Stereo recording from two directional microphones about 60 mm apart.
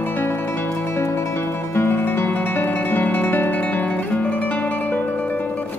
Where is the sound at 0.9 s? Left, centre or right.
Left.